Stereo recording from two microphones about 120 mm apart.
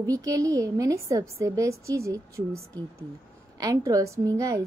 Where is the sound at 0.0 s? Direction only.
30° right (ahead or behind).